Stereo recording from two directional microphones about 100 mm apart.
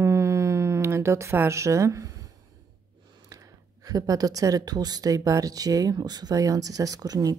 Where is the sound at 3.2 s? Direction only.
35° right (ahead or behind).